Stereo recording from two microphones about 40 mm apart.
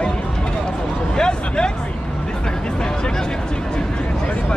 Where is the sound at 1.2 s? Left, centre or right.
Left.